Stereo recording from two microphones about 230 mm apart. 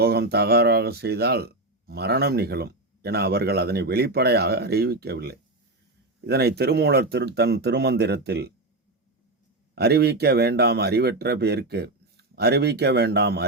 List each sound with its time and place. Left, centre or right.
0.0 s a man's voice: right
9.7 s a man's voice: right